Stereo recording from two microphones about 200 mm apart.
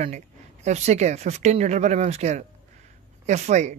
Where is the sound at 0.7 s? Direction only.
35° right (ahead or behind).